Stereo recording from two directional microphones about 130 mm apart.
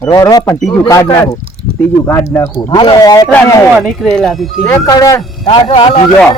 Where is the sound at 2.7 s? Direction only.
40° left (ahead or behind).